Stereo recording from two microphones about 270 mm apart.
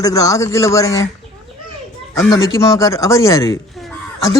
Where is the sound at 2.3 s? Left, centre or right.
Centre.